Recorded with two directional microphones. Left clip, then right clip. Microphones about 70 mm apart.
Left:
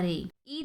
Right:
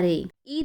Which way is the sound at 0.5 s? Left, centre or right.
Right.